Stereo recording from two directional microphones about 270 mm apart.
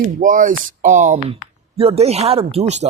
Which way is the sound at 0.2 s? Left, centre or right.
Right.